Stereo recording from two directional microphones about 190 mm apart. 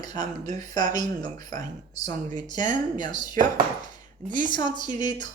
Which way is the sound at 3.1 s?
45° right (ahead or behind).